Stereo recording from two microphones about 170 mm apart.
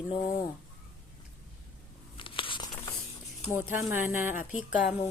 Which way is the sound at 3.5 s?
10° right (ahead or behind).